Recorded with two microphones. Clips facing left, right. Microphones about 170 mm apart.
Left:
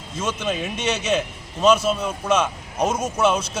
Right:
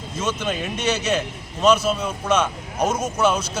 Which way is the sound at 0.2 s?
5° left (ahead or behind).